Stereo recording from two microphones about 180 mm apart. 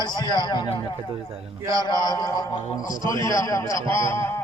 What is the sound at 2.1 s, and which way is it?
A man's voice, 20° left (ahead or behind).